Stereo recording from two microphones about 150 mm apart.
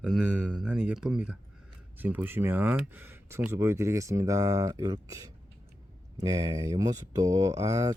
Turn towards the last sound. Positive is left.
turn(degrees=-25)  # may be behind; listen again after turning